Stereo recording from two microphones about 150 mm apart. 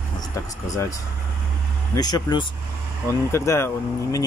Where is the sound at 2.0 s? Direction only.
30° left (ahead or behind).